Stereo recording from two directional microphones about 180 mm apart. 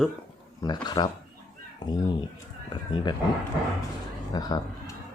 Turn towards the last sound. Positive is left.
turn(degrees=20)  # may be behind; listen again after turning